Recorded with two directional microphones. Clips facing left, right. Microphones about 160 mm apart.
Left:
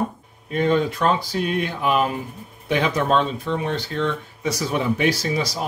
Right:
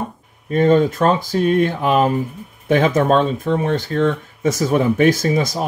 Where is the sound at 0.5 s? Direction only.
45° right (ahead or behind).